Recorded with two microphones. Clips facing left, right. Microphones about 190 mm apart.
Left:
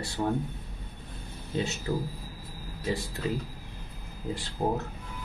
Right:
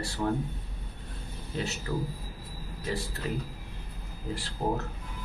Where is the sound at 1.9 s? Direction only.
25° left (ahead or behind).